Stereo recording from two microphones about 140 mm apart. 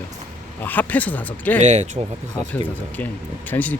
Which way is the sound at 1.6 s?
55° right (ahead or behind).